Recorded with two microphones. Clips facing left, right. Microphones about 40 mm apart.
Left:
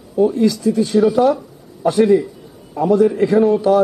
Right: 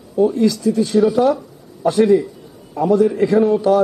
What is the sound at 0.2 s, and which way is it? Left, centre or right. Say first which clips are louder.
A man's voice: even; centre.